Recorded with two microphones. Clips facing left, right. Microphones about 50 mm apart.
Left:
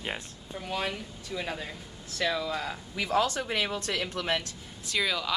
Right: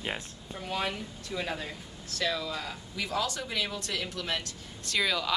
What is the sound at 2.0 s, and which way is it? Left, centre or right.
Speech, centre.